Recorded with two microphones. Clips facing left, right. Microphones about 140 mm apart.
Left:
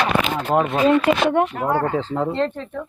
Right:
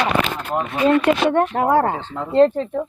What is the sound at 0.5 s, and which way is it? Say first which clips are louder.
Speech: left 5 dB; 75° left (ahead or behind).